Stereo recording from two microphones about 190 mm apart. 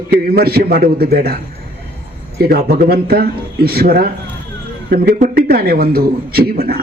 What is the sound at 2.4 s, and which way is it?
A man's voice, 50° right (ahead or behind).